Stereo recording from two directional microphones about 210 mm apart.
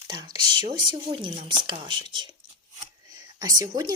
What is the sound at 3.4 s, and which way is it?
Speech, 20° right (ahead or behind).